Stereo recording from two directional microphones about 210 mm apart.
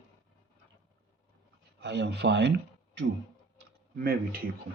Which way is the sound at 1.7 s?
55° right (ahead or behind).